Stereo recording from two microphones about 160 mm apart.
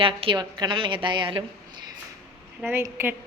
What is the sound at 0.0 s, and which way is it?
A woman's voice, 35° right (ahead or behind).